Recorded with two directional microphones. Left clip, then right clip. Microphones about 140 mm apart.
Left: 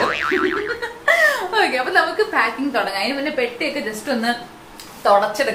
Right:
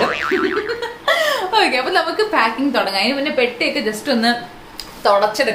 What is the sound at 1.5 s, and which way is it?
A woman's voice, 25° right (ahead or behind).